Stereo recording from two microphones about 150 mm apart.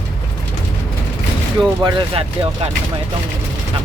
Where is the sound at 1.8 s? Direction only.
35° right (ahead or behind).